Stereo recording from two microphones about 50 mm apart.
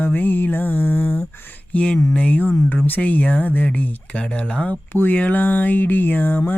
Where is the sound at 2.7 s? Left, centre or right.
Left.